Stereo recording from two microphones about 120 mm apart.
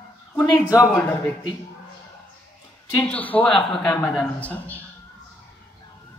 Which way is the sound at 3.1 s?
15° left (ahead or behind).